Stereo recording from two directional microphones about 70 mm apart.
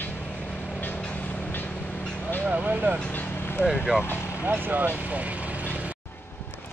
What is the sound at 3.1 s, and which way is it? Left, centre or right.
Vehicle, left.